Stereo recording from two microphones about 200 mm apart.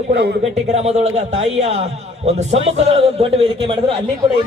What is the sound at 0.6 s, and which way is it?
A man's voice, 35° right (ahead or behind).